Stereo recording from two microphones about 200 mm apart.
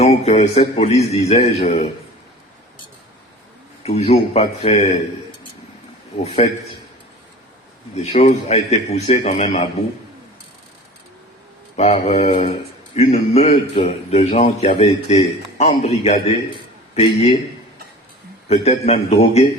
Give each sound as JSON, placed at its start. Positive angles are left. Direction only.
{"t": 0.0, "sound": "speech", "side_deg": 30}
{"t": 3.8, "sound": "speech", "side_deg": 30}
{"t": 6.2, "sound": "speech", "side_deg": 30}
{"t": 8.1, "sound": "speech", "side_deg": 35}
{"t": 11.8, "sound": "a man's voice", "side_deg": 35}
{"t": 18.4, "sound": "speech", "side_deg": 30}